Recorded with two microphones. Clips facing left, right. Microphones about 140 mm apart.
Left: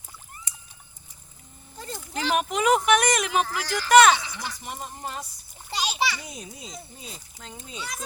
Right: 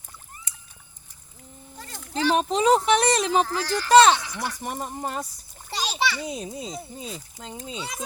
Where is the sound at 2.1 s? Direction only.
30° right (ahead or behind).